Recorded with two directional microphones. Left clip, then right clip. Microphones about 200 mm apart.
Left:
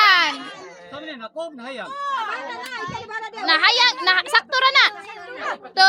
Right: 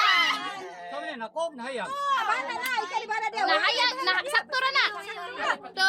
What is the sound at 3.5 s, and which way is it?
Speech, 45° left (ahead or behind).